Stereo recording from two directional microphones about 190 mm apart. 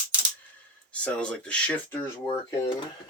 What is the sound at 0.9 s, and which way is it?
Speech, 5° left (ahead or behind).